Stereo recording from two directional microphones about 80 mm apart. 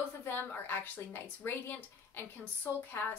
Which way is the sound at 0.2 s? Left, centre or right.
Left.